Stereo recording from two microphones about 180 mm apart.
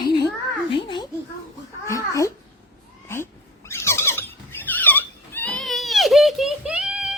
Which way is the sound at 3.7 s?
15° left (ahead or behind).